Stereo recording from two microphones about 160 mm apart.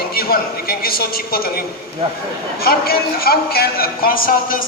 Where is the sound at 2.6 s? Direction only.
70° left (ahead or behind).